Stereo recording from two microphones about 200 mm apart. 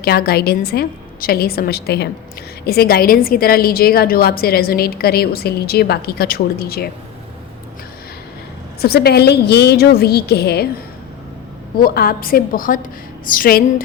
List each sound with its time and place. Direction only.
0.0 s a woman's voice: 50° left (ahead or behind)
8.8 s a woman's voice: 50° left (ahead or behind)
11.8 s a woman's voice: 50° left (ahead or behind)